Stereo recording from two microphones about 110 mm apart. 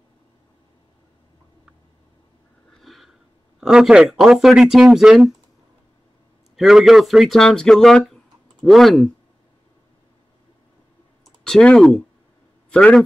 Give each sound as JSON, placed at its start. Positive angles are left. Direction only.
{"t": 2.7, "sound": "a sound", "side_deg": 0}
{"t": 3.6, "sound": "speech", "side_deg": -5}
{"t": 6.5, "sound": "speech", "side_deg": -5}
{"t": 11.4, "sound": "a man's voice", "side_deg": 5}